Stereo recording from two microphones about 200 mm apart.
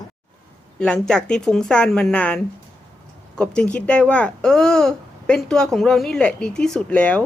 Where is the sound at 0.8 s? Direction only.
5° left (ahead or behind).